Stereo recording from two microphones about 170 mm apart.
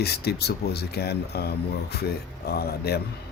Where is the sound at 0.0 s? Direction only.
70° left (ahead or behind).